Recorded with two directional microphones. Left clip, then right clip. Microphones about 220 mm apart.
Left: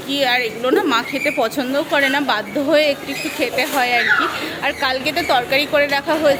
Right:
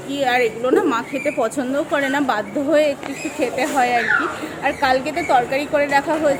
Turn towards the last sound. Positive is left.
turn(degrees=0)  # may be behind; listen again after turning